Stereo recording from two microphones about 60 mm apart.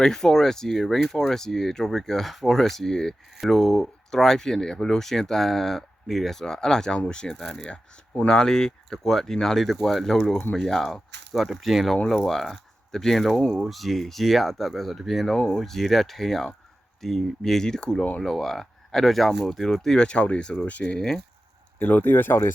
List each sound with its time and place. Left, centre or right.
0.0 s speech: centre
21.8 s speech: left